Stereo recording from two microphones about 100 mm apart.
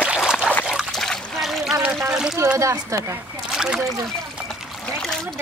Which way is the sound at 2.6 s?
30° right (ahead or behind).